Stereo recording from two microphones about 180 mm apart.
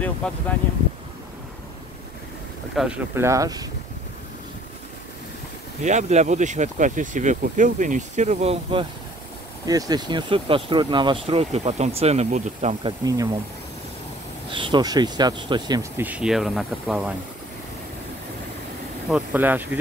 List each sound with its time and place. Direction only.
0.0 s speech: 10° left (ahead or behind)
2.7 s speech: 5° right (ahead or behind)
3.2 s speech: 15° right (ahead or behind)
5.8 s speech: 40° right (ahead or behind)
9.7 s speech: 20° right (ahead or behind); by 12.7 s 40° right (ahead or behind)
12.8 s speech: 20° right (ahead or behind)
14.5 s speech: 25° right (ahead or behind)
16.0 s speech: 5° right (ahead or behind)
19.0 s speech: 5° right (ahead or behind)